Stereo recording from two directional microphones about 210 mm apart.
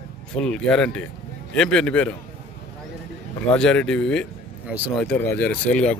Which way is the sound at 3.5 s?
5° left (ahead or behind).